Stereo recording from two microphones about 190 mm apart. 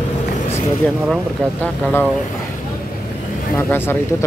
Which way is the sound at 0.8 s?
Centre (ahead or behind).